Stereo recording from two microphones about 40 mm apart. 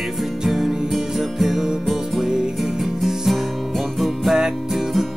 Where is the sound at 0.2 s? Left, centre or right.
Centre.